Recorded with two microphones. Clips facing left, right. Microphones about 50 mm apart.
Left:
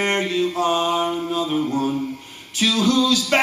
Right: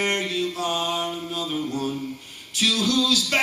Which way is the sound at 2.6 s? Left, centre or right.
Centre.